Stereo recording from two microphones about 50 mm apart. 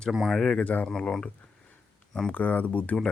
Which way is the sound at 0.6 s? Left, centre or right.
Left.